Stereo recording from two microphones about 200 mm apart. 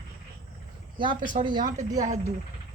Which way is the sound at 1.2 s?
40° right (ahead or behind).